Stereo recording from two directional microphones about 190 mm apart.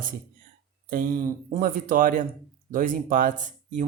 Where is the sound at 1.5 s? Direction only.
45° right (ahead or behind).